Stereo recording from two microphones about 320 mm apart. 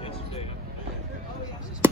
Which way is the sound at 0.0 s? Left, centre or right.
Centre.